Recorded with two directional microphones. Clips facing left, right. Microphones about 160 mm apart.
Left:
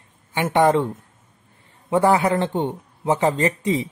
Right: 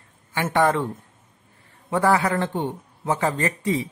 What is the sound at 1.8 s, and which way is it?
Speech, 20° left (ahead or behind).